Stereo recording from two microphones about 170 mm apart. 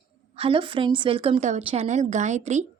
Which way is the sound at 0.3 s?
30° right (ahead or behind).